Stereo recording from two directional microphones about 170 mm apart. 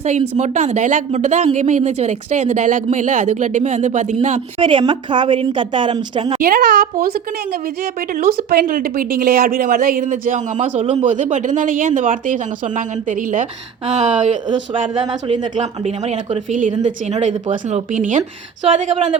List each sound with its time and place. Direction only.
0.0 s a woman's voice: 45° right (ahead or behind)
4.6 s a woman's voice: 25° right (ahead or behind)
6.5 s a woman's voice: 60° right (ahead or behind); by 14.3 s 40° right (ahead or behind)
14.4 s a woman's voice: 25° right (ahead or behind)
15.5 s a woman's voice: 40° right (ahead or behind)